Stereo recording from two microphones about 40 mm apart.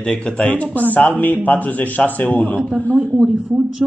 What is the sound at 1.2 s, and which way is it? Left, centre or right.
A man's voice, left.